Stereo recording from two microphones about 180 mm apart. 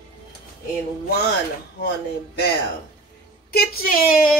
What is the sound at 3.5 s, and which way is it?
Speech, 55° left (ahead or behind).